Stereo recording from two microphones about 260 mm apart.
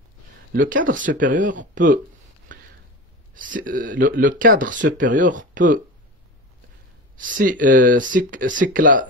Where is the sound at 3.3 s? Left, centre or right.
Right.